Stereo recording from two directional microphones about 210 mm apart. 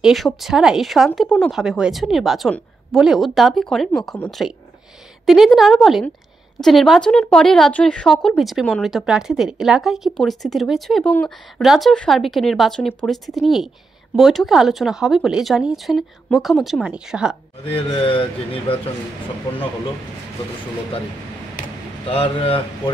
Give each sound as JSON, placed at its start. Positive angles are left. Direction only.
{"t": 0.0, "sound": "speech", "side_deg": 0}
{"t": 18.0, "sound": "speech", "side_deg": 25}
{"t": 22.0, "sound": "speech", "side_deg": 25}